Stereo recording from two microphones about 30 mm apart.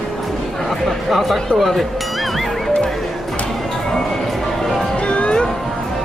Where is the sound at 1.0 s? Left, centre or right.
Centre.